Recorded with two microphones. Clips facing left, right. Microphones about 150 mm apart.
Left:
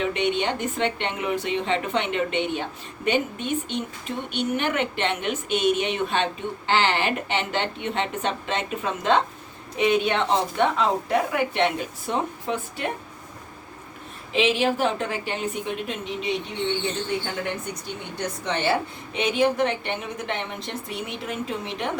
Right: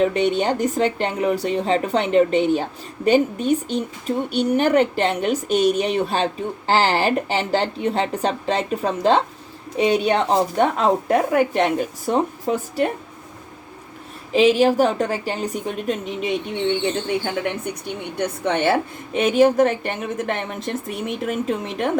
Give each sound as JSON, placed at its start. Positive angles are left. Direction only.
{"t": 0.0, "sound": "a woman's voice", "side_deg": -40}
{"t": 14.3, "sound": "a woman's voice", "side_deg": -40}
{"t": 18.2, "sound": "a woman's voice", "side_deg": -55}